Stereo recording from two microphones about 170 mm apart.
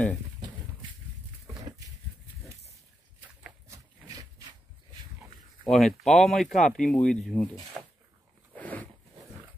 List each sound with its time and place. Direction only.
3.6 s a sound: 20° right (ahead or behind)
5.6 s speech: 5° left (ahead or behind)
8.5 s zipper: 10° left (ahead or behind)